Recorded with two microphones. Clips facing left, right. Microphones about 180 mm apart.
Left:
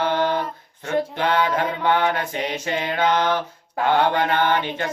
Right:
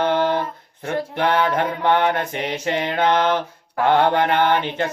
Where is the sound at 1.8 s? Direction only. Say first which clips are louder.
Right 3 dB; 25° right (ahead or behind).